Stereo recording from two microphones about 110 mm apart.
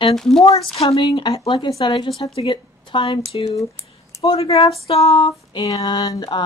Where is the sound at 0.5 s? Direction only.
65° left (ahead or behind); by 1.2 s 50° left (ahead or behind).